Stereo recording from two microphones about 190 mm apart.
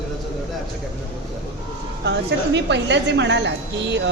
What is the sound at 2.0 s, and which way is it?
A woman's voice, 65° right (ahead or behind).